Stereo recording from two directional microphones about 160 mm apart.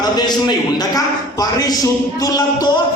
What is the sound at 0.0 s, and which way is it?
A man's voice, 25° left (ahead or behind).